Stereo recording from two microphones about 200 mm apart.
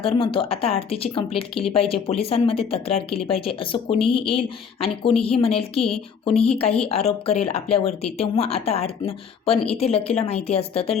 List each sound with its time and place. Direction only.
0.2 s speech: 25° left (ahead or behind)